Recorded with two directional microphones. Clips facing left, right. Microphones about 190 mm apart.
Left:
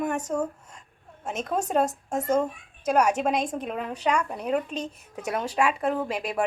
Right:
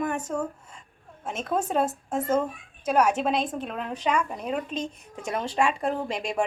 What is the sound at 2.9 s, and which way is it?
Speech, 10° left (ahead or behind).